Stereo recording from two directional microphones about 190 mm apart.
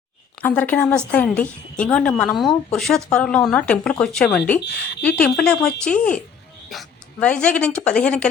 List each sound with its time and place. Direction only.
0.4 s a woman's voice: 10° left (ahead or behind)